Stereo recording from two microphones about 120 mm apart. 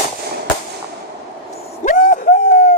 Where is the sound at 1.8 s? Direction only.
90° left.